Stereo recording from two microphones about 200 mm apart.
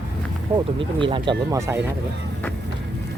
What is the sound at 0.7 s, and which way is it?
Speech, 25° right (ahead or behind).